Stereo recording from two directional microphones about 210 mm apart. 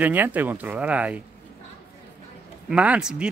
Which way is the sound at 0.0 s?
10° right (ahead or behind).